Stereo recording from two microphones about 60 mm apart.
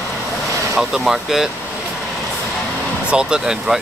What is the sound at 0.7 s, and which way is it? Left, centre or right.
Speech, centre.